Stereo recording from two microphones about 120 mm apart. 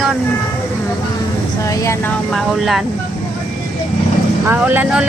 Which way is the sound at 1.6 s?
25° left (ahead or behind).